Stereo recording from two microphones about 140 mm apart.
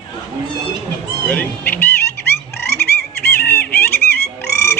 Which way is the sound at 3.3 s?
15° left (ahead or behind).